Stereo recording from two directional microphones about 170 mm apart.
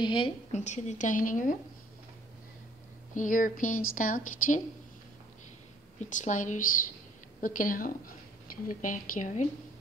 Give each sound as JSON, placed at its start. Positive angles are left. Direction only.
{"t": 0.0, "sound": "a woman's voice", "side_deg": 30}
{"t": 0.5, "sound": "speech", "side_deg": 45}
{"t": 3.2, "sound": "speech", "side_deg": 50}
{"t": 5.9, "sound": "speech", "side_deg": 45}